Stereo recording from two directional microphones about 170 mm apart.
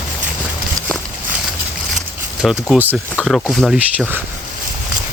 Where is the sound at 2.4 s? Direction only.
Centre (ahead or behind).